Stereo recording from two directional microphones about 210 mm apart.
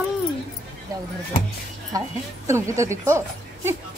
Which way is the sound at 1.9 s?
15° right (ahead or behind).